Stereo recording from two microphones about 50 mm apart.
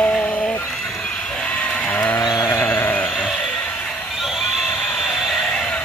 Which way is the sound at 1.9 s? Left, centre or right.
Left.